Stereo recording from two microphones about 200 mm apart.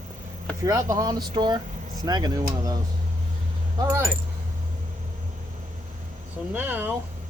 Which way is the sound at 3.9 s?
10° right (ahead or behind).